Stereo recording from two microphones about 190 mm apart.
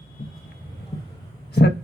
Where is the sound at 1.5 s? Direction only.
60° left (ahead or behind).